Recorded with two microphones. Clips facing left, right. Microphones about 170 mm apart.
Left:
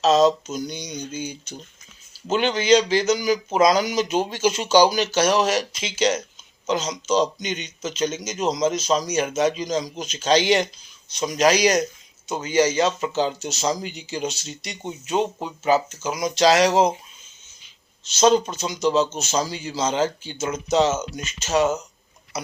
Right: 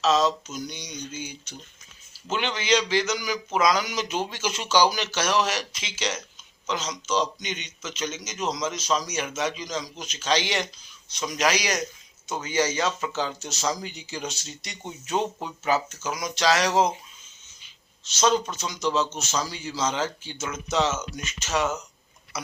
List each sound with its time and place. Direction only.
0.0 s a man's voice: 40° left (ahead or behind)
18.0 s speech: 30° left (ahead or behind)